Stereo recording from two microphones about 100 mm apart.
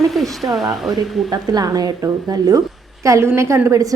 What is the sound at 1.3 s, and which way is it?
A woman's voice, 40° right (ahead or behind).